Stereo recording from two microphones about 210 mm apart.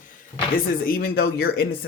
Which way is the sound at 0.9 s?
45° left (ahead or behind).